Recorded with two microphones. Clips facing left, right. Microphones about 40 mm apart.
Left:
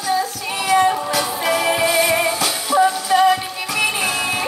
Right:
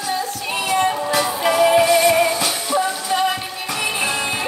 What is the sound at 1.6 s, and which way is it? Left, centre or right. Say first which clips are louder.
Music: right 5 dB; centre.